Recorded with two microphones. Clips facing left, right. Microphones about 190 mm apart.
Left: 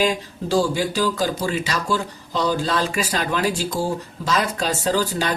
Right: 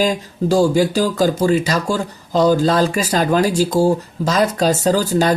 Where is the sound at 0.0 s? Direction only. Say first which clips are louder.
Right 4 dB; 45° right (ahead or behind).